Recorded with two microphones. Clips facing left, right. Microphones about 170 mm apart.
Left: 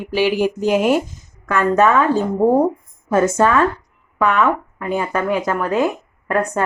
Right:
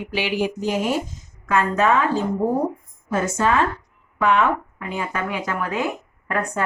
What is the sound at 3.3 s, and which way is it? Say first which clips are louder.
Speech: left 5 dB; 50° left (ahead or behind).